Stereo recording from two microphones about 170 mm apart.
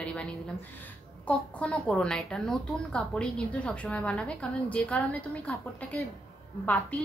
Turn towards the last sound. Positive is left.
turn(degrees=10)  # may be behind; listen again after turning